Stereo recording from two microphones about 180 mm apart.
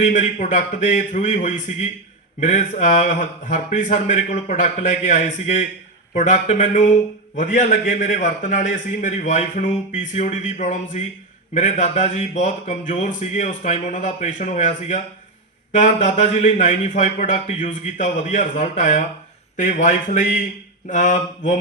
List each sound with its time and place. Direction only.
0.1 s a man's voice: 45° left (ahead or behind)